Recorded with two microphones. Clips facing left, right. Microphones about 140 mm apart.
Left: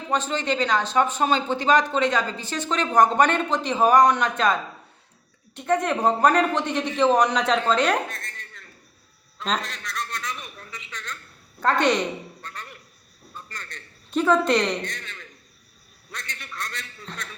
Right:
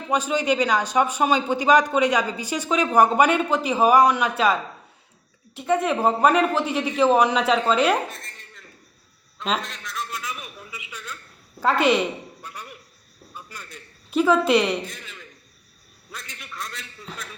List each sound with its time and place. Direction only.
0.1 s a man's voice: 10° right (ahead or behind)
5.5 s a man's voice: 5° right (ahead or behind)